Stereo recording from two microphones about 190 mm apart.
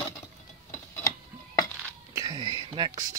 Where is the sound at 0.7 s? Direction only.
15° left (ahead or behind).